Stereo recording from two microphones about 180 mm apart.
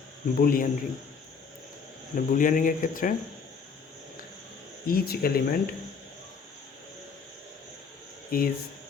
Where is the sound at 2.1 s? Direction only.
50° left (ahead or behind).